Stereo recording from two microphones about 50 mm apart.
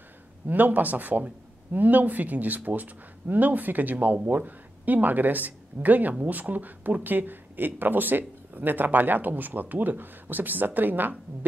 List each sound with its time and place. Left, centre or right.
0.5 s a man's voice: right